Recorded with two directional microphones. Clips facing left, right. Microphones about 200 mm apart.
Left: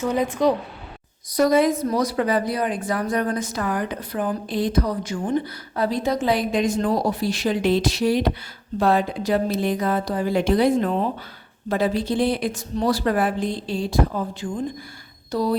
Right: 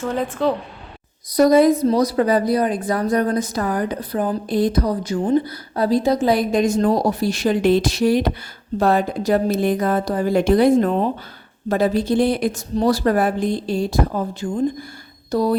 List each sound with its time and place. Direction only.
0.0 s speech: 15° left (ahead or behind)
1.3 s a woman's voice: 35° right (ahead or behind)